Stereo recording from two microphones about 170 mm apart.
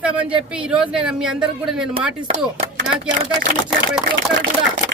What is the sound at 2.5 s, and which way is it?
Speech, 30° right (ahead or behind).